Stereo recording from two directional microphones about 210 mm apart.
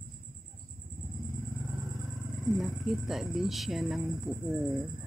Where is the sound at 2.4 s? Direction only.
Centre (ahead or behind).